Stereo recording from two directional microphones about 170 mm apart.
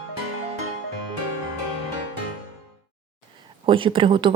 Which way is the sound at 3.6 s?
30° right (ahead or behind).